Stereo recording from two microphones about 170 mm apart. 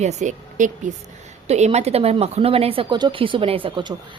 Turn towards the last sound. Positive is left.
turn(degrees=-30)  # may be behind; listen again after turning